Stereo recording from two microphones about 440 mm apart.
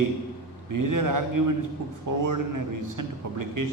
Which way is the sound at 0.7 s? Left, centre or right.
Right.